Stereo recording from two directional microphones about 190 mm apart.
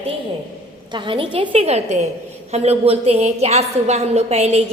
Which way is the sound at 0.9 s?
25° right (ahead or behind).